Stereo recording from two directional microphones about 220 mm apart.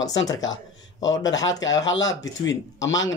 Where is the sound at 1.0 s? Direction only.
60° left (ahead or behind).